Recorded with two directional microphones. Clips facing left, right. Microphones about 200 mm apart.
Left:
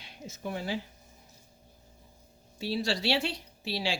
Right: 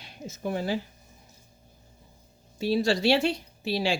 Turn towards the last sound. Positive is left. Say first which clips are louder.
# right 6 dB
turn(degrees=-50)  # may be behind; listen again after turning